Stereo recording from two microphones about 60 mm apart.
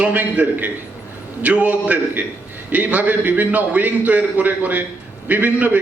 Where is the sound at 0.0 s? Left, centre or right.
Right.